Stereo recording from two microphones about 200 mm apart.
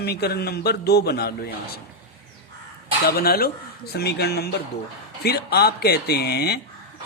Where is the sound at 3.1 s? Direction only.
50° left (ahead or behind).